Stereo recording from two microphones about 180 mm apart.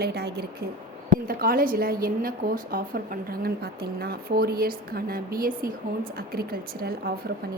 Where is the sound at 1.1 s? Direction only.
55° right (ahead or behind).